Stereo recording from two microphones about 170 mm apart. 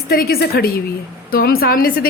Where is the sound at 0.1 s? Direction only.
65° left (ahead or behind).